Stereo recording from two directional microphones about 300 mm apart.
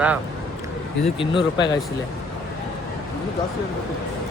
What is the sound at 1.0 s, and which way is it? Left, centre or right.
Speech, centre.